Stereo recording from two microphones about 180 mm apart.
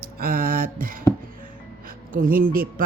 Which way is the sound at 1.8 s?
50° right (ahead or behind).